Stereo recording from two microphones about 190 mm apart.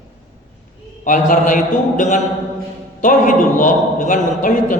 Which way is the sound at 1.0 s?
45° left (ahead or behind).